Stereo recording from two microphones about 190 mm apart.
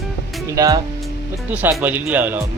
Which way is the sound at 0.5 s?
20° right (ahead or behind).